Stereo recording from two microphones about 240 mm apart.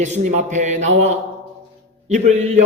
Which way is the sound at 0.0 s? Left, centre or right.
Right.